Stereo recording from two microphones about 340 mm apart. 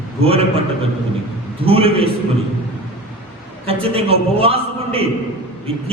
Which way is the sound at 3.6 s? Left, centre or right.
Centre.